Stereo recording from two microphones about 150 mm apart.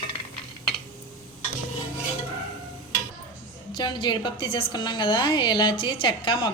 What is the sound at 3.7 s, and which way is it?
A woman's voice, 30° left (ahead or behind).